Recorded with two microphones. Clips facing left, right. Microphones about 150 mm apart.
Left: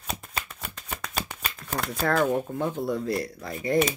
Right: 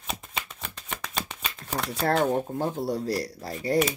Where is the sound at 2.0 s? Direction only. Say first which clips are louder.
Even; 30° right (ahead or behind).